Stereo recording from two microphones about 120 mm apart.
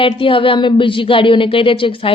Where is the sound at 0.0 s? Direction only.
45° left (ahead or behind).